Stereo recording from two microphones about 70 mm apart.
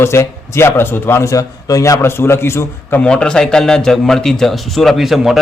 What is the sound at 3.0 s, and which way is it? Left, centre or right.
A man's voice, centre.